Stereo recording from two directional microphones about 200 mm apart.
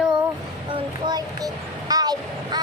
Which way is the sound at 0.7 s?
25° right (ahead or behind).